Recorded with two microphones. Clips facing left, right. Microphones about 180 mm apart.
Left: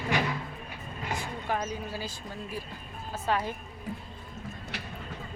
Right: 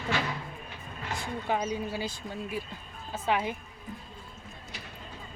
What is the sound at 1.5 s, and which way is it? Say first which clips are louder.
Speech: right 3 dB; 15° right (ahead or behind).